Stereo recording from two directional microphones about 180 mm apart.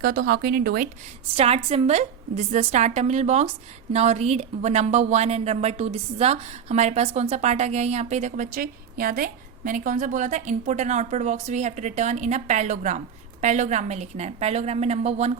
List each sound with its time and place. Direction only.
0.0 s speech: 55° right (ahead or behind)
1.4 s a woman's voice: 35° right (ahead or behind)